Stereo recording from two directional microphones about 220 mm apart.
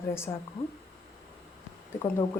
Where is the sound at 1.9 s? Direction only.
10° left (ahead or behind).